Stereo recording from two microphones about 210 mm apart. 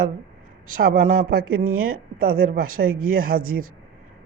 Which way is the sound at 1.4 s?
90° right.